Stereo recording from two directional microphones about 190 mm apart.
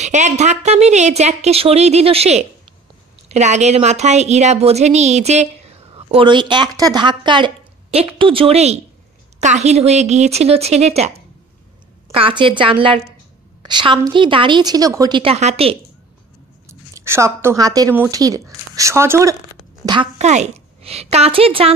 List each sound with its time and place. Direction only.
0.0 s a woman's voice: 40° right (ahead or behind)
12.1 s a woman's voice: 30° right (ahead or behind)
16.6 s speech: 15° right (ahead or behind)
20.2 s a woman's voice: 35° right (ahead or behind)